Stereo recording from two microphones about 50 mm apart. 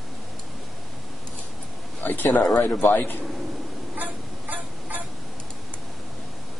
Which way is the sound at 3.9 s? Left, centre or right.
Right.